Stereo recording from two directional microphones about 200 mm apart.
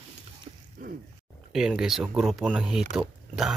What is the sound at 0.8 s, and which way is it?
Grunt, 40° right (ahead or behind).